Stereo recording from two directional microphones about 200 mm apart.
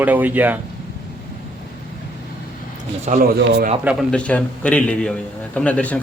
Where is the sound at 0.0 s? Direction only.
10° right (ahead or behind).